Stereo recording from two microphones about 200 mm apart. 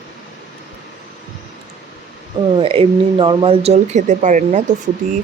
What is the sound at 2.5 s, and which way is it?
Speech, 25° right (ahead or behind).